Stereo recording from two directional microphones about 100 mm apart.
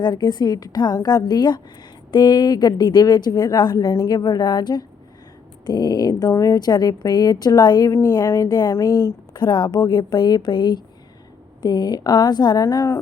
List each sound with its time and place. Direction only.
0.0 s a woman's voice: 45° left (ahead or behind)
7.9 s speech: 25° left (ahead or behind)
9.3 s a woman's voice: 45° left (ahead or behind)
12.7 s speech: 30° left (ahead or behind)